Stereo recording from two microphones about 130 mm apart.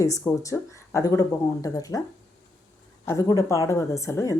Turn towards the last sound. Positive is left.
turn(degrees=25)  # may be behind; listen again after turning